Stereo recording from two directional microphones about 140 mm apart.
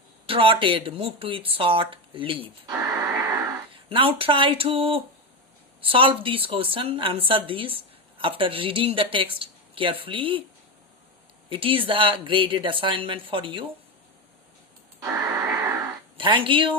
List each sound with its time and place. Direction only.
0.3 s speech: 40° right (ahead or behind)
2.6 s a sound: 25° right (ahead or behind)
3.8 s speech: 40° right (ahead or behind)
11.4 s speech: 35° right (ahead or behind)
15.0 s a sound: 20° right (ahead or behind)
16.1 s speech: 40° right (ahead or behind)